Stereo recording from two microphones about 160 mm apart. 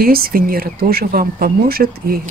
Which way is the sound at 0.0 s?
70° right (ahead or behind).